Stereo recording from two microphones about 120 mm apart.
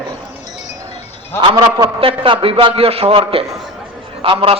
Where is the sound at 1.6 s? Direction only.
45° right (ahead or behind).